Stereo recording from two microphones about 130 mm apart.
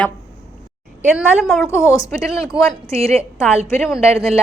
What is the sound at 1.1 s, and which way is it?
Speech, centre (ahead or behind).